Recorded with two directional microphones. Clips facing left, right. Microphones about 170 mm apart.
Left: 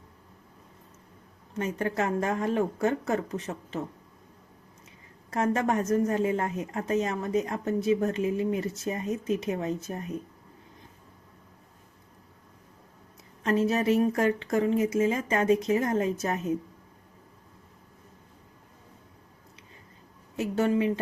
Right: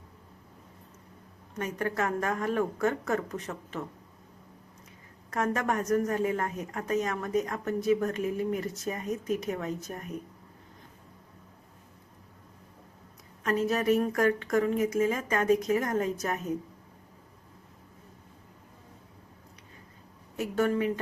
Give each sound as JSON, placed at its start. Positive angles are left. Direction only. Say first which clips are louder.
{"t": 1.5, "sound": "a woman's voice", "louder": "left 2 dB", "side_deg": 25}
{"t": 5.3, "sound": "a woman's voice", "louder": "left 3 dB", "side_deg": 25}
{"t": 13.4, "sound": "a woman's voice", "louder": "left 2 dB", "side_deg": 25}
{"t": 20.3, "sound": "a woman's voice", "louder": "left 2 dB", "side_deg": 20}